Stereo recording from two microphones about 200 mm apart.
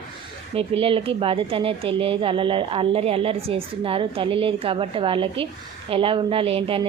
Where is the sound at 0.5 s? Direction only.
30° right (ahead or behind).